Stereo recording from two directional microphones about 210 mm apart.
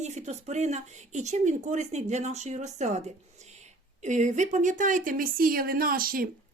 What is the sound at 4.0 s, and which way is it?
A woman's voice, 35° right (ahead or behind).